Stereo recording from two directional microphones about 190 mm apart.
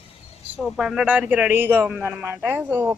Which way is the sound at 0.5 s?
5° right (ahead or behind).